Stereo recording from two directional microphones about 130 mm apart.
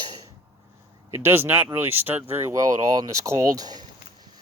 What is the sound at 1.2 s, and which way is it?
Speech, 15° right (ahead or behind).